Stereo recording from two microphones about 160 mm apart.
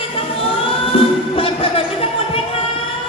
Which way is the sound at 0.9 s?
35° left (ahead or behind).